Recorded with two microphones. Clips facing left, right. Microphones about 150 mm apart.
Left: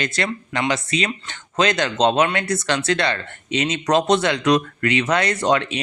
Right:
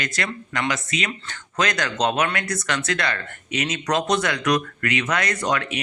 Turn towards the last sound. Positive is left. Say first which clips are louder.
# left 5 dB
turn(degrees=25)  # may be behind; listen again after turning